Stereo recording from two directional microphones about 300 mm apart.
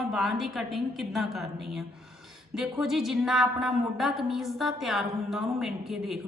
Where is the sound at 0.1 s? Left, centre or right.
Centre.